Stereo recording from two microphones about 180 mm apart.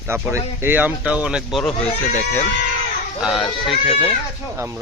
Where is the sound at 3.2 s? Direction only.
Centre (ahead or behind).